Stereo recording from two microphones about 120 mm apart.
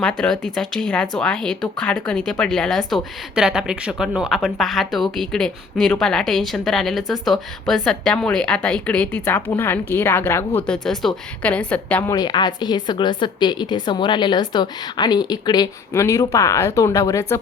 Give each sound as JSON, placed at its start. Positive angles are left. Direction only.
{"t": 0.0, "sound": "a woman's voice", "side_deg": 5}
{"t": 12.1, "sound": "a woman's voice", "side_deg": 35}